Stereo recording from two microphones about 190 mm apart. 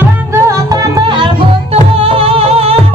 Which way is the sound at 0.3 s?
15° right (ahead or behind).